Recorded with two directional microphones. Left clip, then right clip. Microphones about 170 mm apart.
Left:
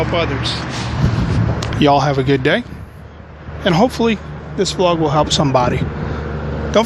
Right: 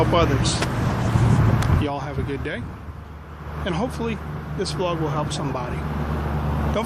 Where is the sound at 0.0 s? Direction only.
5° right (ahead or behind).